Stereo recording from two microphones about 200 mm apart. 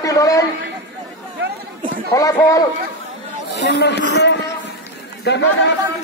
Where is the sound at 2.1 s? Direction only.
15° left (ahead or behind).